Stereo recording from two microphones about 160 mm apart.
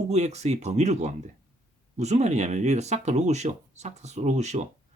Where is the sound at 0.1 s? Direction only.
45° right (ahead or behind).